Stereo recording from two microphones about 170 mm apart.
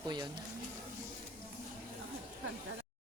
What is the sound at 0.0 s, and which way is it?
Speech, 25° right (ahead or behind).